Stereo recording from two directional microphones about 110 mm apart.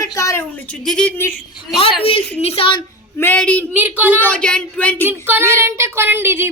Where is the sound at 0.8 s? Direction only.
5° left (ahead or behind).